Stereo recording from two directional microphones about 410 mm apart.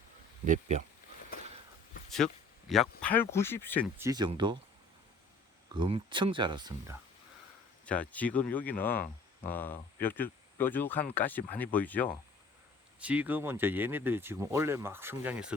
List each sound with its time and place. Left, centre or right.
0.4 s speech: centre
2.0 s a sound: centre
3.0 s speech: centre
5.7 s speech: centre
7.9 s speech: centre